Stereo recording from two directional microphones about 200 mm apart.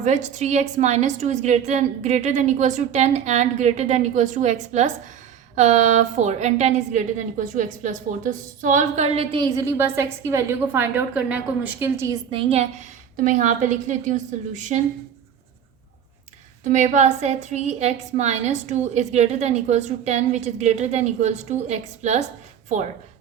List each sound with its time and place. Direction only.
0.3 s a woman's voice: 35° right (ahead or behind)
9.6 s a woman's voice: 15° right (ahead or behind)
12.3 s a woman's voice: 30° right (ahead or behind)
13.1 s a woman's voice: 40° right (ahead or behind)
16.6 s a woman's voice: 40° right (ahead or behind)